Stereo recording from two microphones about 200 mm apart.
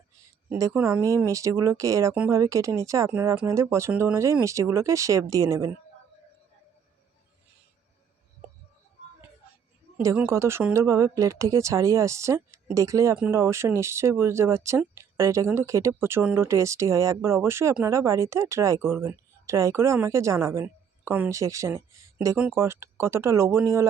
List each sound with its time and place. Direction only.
0.5 s speech: 10° right (ahead or behind)
10.0 s speech: 15° right (ahead or behind)